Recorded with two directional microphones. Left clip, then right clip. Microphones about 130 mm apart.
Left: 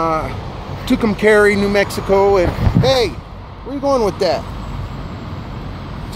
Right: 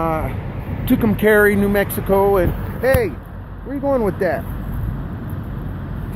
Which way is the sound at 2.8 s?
50° left (ahead or behind).